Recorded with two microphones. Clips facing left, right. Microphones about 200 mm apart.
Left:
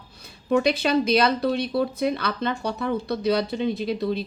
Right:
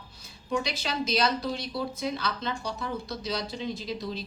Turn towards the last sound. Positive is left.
turn(degrees=60)  # may be behind; listen again after turning